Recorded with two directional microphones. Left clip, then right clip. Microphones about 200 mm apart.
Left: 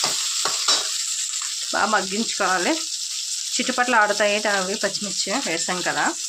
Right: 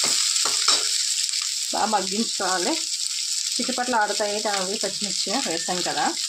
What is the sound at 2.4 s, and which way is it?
Speech, 30° left (ahead or behind).